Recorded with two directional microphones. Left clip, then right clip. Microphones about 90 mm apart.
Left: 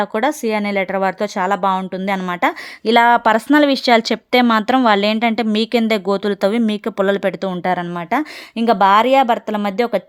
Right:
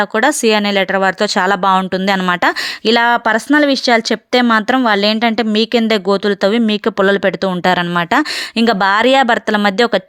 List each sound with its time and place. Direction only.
0.0 s speech: 15° right (ahead or behind)
1.5 s speech: 35° right (ahead or behind)
2.8 s speech: 15° right (ahead or behind)
7.6 s speech: 35° right (ahead or behind)